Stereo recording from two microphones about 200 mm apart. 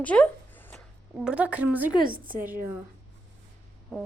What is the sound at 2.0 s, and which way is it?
Speech, 45° right (ahead or behind).